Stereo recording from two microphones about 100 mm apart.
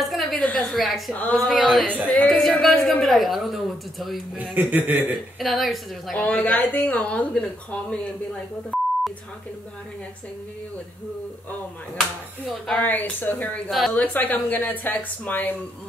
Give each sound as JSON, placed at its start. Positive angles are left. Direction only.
{"t": 0.0, "sound": "a sound", "side_deg": 0}
{"t": 0.4, "sound": "a woman's voice", "side_deg": 5}
{"t": 4.4, "sound": "a man's voice", "side_deg": -20}
{"t": 5.4, "sound": "speech", "side_deg": 0}
{"t": 6.2, "sound": "speech", "side_deg": 15}
{"t": 12.0, "sound": "speech", "side_deg": 5}
{"t": 12.8, "sound": "speech", "side_deg": 20}
{"t": 13.7, "sound": "speech", "side_deg": 0}
{"t": 13.9, "sound": "speech", "side_deg": 15}